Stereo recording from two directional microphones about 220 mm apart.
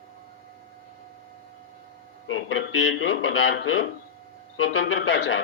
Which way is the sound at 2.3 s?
65° left (ahead or behind).